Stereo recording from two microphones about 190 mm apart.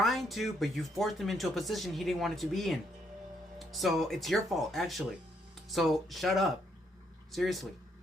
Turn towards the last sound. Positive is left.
turn(degrees=0)  # may be behind; listen again after turning